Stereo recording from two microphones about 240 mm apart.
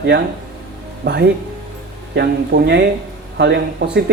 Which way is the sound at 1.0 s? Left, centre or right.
Right.